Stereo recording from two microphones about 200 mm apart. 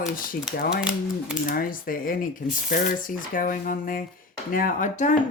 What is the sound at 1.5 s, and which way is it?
Speech, 45° left (ahead or behind).